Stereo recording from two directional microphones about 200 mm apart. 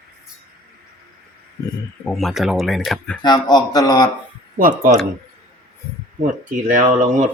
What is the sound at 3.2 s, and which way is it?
Speech, 20° left (ahead or behind).